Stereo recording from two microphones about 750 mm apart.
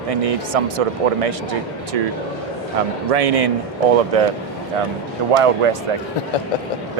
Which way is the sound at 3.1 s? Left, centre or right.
Right.